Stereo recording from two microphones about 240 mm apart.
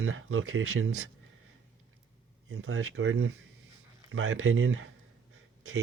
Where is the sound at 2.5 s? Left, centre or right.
Right.